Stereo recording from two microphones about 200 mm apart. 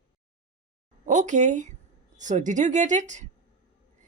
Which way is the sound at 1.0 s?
40° right (ahead or behind).